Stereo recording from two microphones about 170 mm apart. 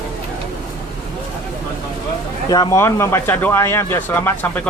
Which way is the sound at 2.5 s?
20° left (ahead or behind).